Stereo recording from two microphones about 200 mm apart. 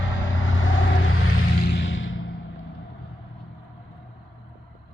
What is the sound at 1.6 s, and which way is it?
Music, 50° left (ahead or behind).